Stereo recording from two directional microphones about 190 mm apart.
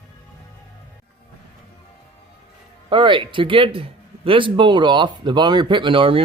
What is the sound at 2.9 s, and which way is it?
Speech, 25° right (ahead or behind).